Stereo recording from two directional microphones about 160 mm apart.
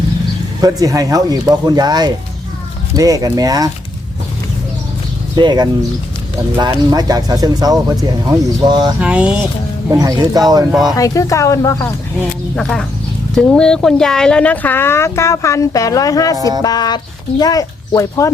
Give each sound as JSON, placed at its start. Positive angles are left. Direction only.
{"t": 0.6, "sound": "speech", "side_deg": -20}
{"t": 5.4, "sound": "speech", "side_deg": -25}
{"t": 9.0, "sound": "a sound", "side_deg": -5}
{"t": 9.9, "sound": "speech", "side_deg": -25}
{"t": 10.9, "sound": "speech", "side_deg": 20}
{"t": 12.5, "sound": "speech", "side_deg": 5}